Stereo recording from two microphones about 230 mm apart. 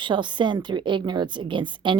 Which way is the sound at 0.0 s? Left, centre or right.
Centre.